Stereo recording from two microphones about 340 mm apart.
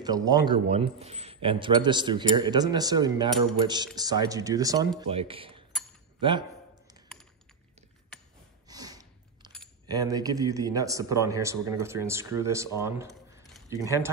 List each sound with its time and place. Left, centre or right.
0.0 s a man's voice: centre
8.6 s chewing: centre
9.8 s a man's voice: centre